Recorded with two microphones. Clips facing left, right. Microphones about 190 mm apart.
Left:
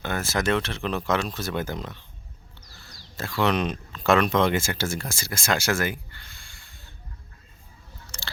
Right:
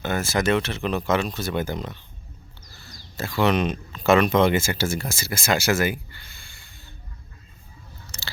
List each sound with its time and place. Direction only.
0.0 s speech: centre (ahead or behind)
8.1 s biting: 10° right (ahead or behind)